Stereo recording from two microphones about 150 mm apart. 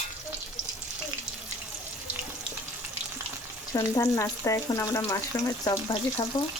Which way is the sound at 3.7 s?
20° left (ahead or behind).